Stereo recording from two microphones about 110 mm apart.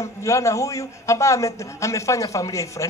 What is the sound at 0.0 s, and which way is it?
A man's voice, 30° left (ahead or behind).